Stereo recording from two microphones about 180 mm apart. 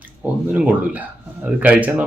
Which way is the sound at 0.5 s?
5° right (ahead or behind).